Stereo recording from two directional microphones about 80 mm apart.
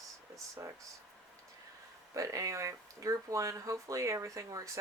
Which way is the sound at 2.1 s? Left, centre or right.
Right.